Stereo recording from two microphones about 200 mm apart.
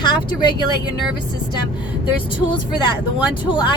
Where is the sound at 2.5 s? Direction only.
25° left (ahead or behind).